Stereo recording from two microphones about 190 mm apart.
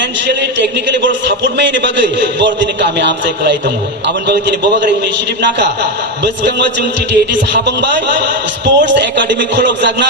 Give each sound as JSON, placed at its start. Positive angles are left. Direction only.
{"t": 0.3, "sound": "a man's voice", "side_deg": -70}
{"t": 5.4, "sound": "a man's voice", "side_deg": -70}